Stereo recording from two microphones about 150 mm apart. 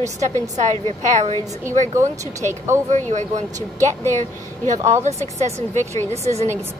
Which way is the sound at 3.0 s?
55° right (ahead or behind).